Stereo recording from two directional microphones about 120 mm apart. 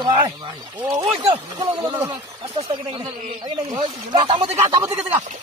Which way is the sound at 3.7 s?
35° right (ahead or behind).